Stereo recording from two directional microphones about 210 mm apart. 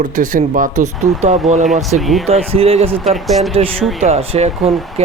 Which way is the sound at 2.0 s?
Centre (ahead or behind).